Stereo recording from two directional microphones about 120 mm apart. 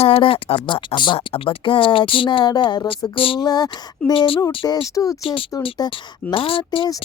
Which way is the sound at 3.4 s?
35° left (ahead or behind).